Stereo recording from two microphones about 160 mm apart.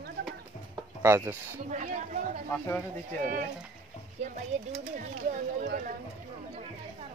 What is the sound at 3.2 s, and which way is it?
Speech, 55° right (ahead or behind).